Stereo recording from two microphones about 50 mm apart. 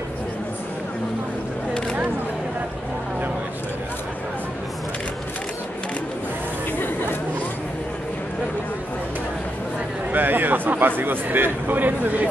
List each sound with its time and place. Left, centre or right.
10.1 s a man's voice: right